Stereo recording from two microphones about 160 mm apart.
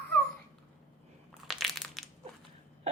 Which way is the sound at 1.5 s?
Centre (ahead or behind).